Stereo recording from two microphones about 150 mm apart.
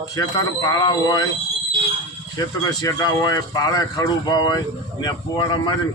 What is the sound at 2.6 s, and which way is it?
A man's voice, 25° left (ahead or behind).